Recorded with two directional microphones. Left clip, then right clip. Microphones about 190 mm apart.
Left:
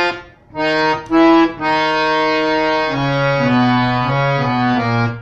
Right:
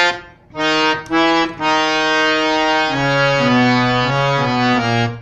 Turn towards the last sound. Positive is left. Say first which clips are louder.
# right 1 dB
turn(degrees=-20)  # may be behind; listen again after turning